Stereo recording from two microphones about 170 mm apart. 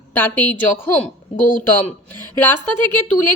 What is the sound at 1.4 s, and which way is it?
Speech, 55° left (ahead or behind).